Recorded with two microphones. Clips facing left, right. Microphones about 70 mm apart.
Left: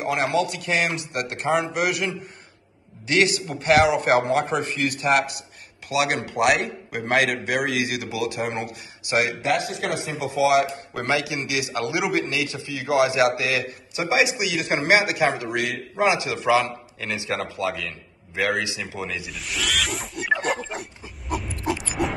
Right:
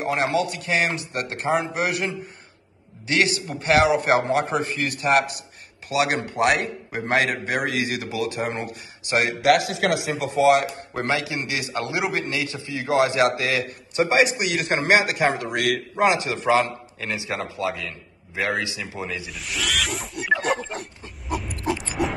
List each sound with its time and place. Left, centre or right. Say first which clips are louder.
0.0 s a man's voice: even; right
9.4 s a man's voice: right 5 dB; right
10.1 s speech: even; right
10.9 s a man's voice: even; right
19.2 s pig: even; centre
22.0 s music: even; centre